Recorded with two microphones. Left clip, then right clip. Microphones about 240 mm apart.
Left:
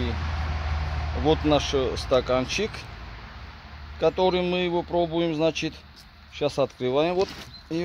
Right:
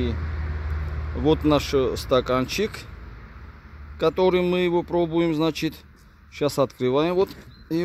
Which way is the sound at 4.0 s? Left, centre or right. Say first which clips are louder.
Right 2 dB; right.